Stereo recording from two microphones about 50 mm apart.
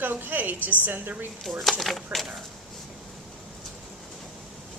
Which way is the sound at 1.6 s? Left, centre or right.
Centre.